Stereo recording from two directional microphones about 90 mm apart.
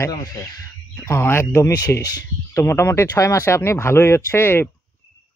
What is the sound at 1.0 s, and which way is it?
Speech, 30° left (ahead or behind).